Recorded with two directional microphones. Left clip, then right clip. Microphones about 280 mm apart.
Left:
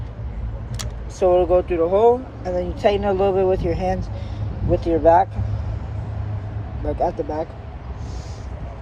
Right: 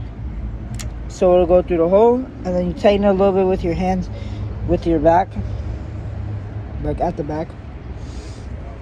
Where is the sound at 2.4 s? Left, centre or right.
Right.